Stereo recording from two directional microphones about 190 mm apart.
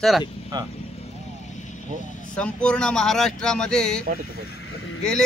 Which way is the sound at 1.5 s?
40° left (ahead or behind).